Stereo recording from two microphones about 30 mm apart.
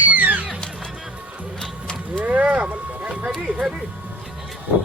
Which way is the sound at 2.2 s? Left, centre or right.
Right.